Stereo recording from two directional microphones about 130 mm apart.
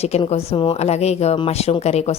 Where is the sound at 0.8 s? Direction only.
55° left (ahead or behind).